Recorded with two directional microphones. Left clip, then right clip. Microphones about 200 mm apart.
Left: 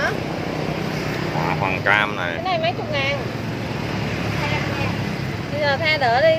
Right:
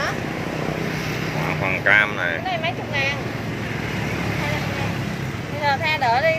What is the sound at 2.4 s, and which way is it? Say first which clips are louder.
Speech: left 3 dB; 50° left (ahead or behind).